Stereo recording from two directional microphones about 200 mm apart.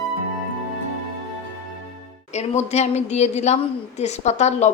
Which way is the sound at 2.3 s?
35° left (ahead or behind).